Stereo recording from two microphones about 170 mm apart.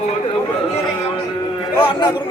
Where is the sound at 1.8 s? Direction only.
25° left (ahead or behind).